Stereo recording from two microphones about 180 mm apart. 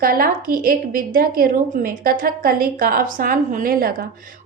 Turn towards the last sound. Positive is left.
turn(degrees=-50)  # may be behind; listen again after turning